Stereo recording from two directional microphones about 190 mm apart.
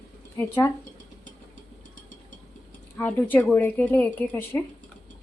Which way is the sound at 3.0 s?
10° left (ahead or behind).